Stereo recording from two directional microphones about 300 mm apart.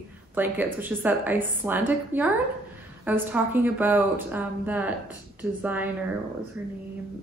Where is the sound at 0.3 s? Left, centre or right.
Centre.